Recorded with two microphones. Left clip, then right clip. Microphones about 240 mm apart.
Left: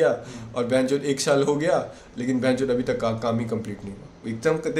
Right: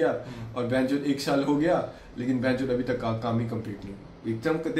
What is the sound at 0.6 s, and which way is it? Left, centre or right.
A man's voice, left.